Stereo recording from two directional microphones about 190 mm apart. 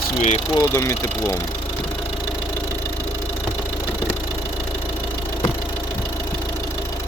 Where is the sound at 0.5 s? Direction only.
15° left (ahead or behind).